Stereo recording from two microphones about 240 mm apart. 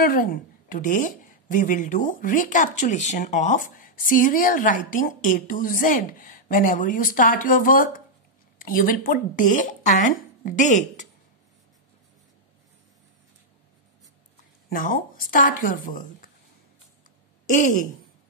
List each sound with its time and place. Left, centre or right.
0.0 s a woman's voice: left
14.7 s a woman's voice: left
17.5 s a woman's voice: left